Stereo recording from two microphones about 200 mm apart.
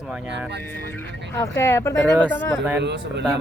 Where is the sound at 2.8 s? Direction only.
60° right (ahead or behind).